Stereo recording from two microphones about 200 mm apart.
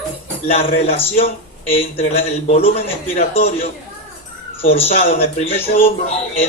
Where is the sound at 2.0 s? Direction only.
30° left (ahead or behind).